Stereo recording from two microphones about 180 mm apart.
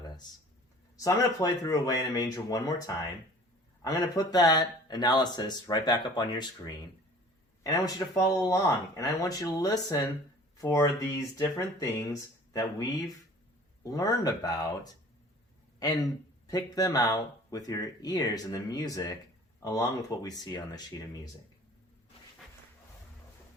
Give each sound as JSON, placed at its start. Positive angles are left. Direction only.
{"t": 0.9, "sound": "speech", "side_deg": 20}
{"t": 13.8, "sound": "speech", "side_deg": 20}
{"t": 15.8, "sound": "speech", "side_deg": 20}